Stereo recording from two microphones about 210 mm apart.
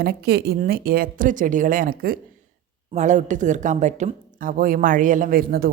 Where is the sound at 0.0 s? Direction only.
50° right (ahead or behind).